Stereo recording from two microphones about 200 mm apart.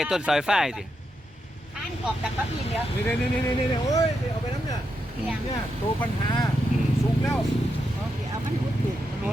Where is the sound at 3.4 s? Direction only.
15° left (ahead or behind).